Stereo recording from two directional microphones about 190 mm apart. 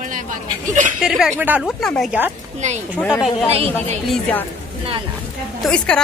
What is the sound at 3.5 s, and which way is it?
Speech, 30° right (ahead or behind).